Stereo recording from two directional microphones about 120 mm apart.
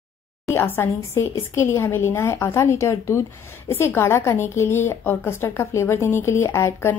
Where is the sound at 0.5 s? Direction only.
20° left (ahead or behind).